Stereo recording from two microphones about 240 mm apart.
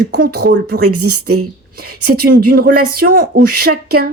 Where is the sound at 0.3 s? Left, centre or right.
Right.